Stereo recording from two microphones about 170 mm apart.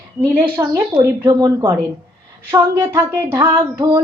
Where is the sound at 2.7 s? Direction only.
15° right (ahead or behind).